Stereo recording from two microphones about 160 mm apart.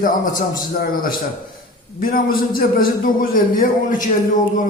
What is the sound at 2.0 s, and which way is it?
A man's voice, 60° left (ahead or behind).